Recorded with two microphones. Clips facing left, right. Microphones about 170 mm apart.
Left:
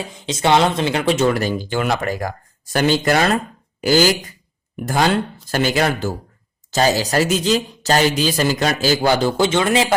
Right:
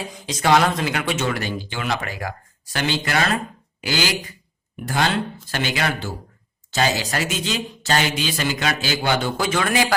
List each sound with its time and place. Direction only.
0.1 s speech: 25° left (ahead or behind)